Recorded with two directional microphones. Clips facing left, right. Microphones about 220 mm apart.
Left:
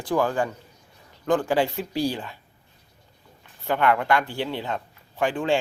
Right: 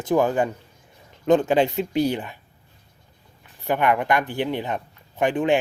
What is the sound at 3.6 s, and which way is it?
Speech, 15° right (ahead or behind).